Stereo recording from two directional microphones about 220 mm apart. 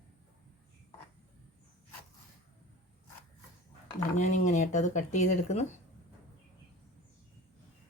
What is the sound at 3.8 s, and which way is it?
Speech, 30° left (ahead or behind).